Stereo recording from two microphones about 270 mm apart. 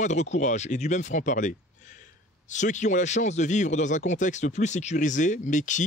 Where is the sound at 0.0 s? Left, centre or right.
Left.